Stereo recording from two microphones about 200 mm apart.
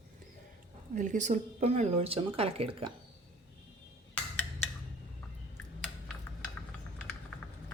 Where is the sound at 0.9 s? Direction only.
40° right (ahead or behind).